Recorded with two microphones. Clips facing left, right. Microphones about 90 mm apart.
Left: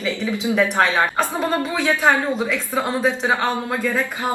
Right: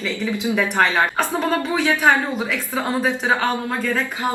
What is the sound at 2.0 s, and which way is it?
A woman's voice, 5° right (ahead or behind).